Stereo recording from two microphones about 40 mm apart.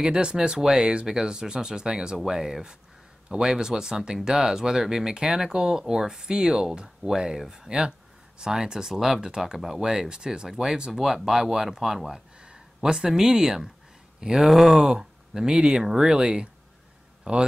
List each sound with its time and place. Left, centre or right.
0.0 s speech: right
14.5 s speech: centre
14.9 s speech: centre
17.2 s a sound: right